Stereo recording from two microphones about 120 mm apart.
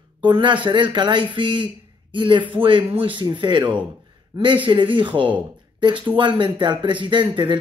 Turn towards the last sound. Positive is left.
turn(degrees=-40)  # may be behind; listen again after turning